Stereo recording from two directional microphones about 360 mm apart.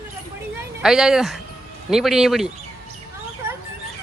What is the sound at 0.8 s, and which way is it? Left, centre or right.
Speech, centre.